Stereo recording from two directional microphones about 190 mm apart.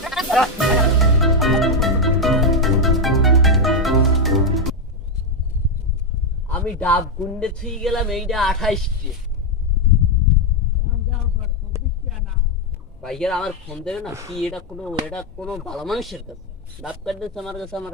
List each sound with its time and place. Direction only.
0.0 s music: centre (ahead or behind)
6.5 s speech: 5° left (ahead or behind)
13.0 s speech: 5° left (ahead or behind)